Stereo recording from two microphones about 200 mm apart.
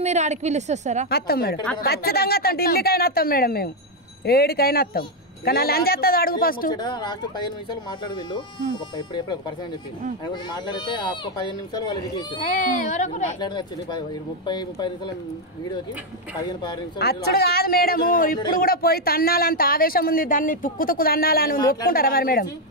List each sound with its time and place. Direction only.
0.0 s a woman's voice: 35° right (ahead or behind)
1.1 s speech: 50° left (ahead or behind)
6.7 s speech: 20° left (ahead or behind)
8.9 s speech: 20° left (ahead or behind)
12.4 s speech: 40° left (ahead or behind)
13.4 s speech: 20° left (ahead or behind)
16.3 s speech: 20° left (ahead or behind)
17.0 s speech: 50° left (ahead or behind)